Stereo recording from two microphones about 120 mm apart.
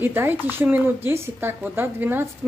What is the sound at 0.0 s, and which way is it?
Speech, 15° right (ahead or behind).